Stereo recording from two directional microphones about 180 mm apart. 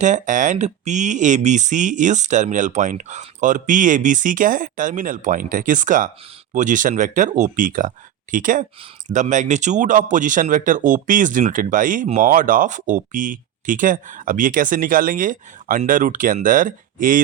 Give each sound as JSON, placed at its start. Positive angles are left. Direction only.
{"t": 0.0, "sound": "speech", "side_deg": -45}